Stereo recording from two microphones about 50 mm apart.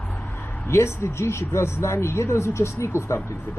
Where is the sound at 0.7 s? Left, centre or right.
Left.